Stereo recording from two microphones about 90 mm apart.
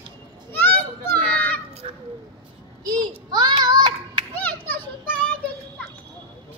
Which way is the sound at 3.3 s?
50° right (ahead or behind).